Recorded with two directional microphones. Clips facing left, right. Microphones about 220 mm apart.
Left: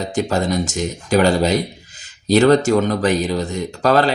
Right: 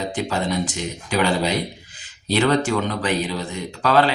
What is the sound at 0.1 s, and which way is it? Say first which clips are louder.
Speech: left 5 dB; 45° left (ahead or behind).